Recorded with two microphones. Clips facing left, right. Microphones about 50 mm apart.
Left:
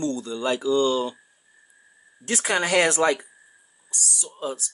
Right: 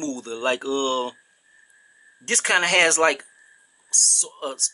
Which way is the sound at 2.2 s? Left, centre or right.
Right.